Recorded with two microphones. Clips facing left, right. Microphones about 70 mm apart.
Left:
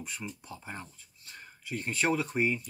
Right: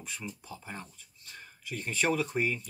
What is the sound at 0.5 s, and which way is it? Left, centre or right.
Speech, centre.